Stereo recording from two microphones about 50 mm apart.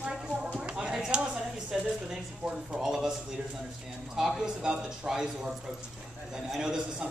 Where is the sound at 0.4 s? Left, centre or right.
Right.